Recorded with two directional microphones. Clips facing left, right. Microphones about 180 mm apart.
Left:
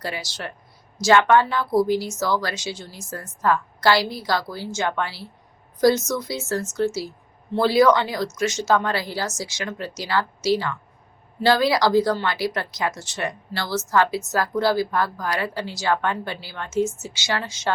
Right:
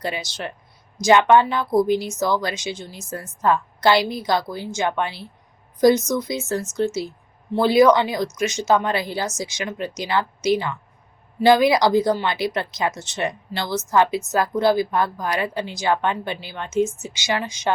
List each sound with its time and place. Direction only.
0.0 s a woman's voice: 20° right (ahead or behind)